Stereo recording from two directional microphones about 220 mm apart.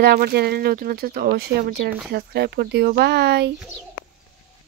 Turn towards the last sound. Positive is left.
turn(degrees=-50)  # may be behind; listen again after turning